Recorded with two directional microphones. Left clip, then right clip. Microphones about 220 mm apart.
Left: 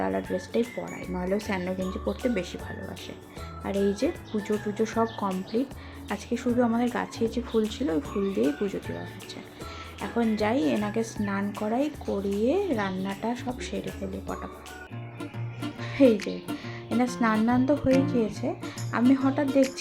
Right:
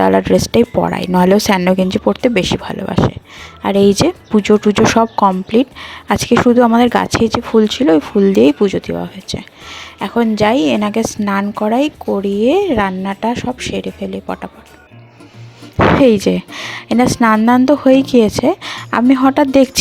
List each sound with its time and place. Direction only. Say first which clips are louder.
0.0 s a woman's voice: right 18 dB; 45° right (ahead or behind)
16.0 s a woman's voice: right 11 dB; 45° right (ahead or behind)